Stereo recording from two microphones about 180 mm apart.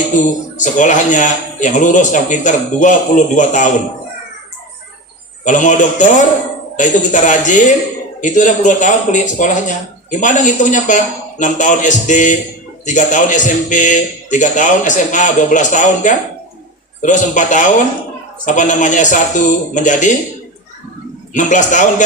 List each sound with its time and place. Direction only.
0.2 s a man's voice: 45° left (ahead or behind)
5.5 s a man's voice: 45° left (ahead or behind)
21.3 s a man's voice: 45° left (ahead or behind)